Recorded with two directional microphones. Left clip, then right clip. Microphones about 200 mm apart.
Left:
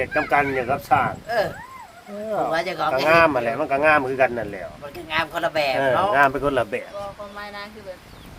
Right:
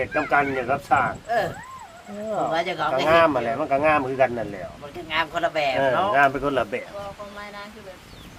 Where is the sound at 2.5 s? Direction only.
45° left (ahead or behind).